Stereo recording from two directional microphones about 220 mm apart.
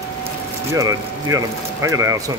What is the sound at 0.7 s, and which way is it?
Speech, 15° right (ahead or behind).